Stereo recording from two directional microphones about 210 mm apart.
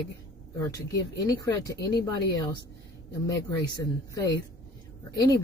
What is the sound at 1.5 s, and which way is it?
Speech, 20° left (ahead or behind).